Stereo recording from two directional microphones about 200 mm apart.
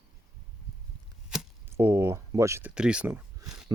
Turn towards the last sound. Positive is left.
turn(degrees=0)  # may be behind; listen again after turning